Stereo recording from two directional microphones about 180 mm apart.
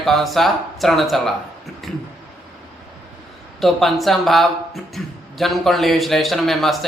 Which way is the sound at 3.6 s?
Centre (ahead or behind).